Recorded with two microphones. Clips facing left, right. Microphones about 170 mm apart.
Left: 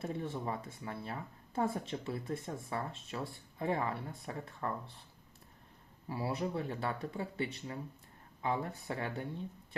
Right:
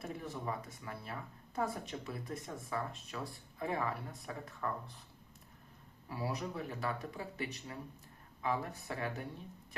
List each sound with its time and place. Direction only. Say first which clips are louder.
0.0 s speech: left 3 dB; 30° left (ahead or behind)
6.1 s speech: left 3 dB; 30° left (ahead or behind)